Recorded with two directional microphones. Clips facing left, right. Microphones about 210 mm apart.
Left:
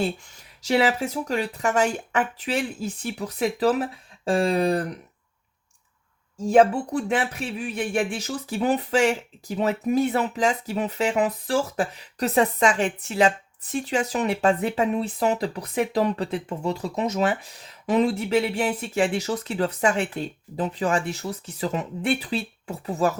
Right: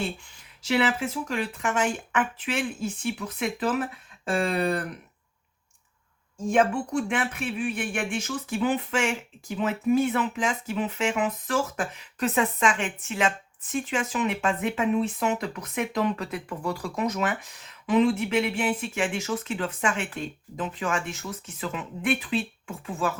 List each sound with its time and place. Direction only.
0.6 s speech: 40° left (ahead or behind)
6.5 s speech: 35° left (ahead or behind)